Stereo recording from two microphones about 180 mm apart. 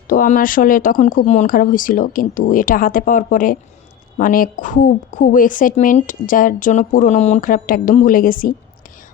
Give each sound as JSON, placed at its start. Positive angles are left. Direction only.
{"t": 0.1, "sound": "a woman's voice", "side_deg": 50}